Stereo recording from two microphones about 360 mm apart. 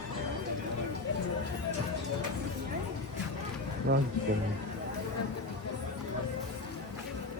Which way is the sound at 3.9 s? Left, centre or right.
Right.